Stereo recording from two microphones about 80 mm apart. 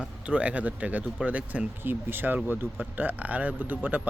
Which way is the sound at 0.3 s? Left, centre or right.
Centre.